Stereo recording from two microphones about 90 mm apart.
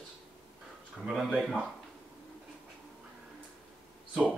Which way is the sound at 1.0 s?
Centre (ahead or behind).